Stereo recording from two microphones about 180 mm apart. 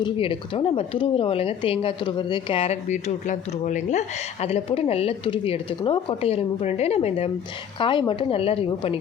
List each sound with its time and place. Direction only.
0.0 s speech: 30° left (ahead or behind)